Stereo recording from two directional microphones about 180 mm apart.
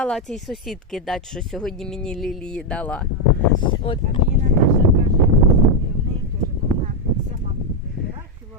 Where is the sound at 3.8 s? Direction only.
30° left (ahead or behind).